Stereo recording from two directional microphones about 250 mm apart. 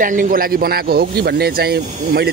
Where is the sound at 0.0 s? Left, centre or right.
Right.